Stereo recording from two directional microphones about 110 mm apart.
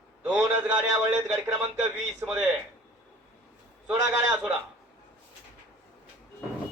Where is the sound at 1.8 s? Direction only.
10° right (ahead or behind).